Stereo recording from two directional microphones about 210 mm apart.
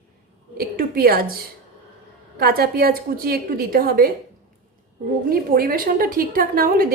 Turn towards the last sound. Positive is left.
turn(degrees=-45)  # may be behind; listen again after turning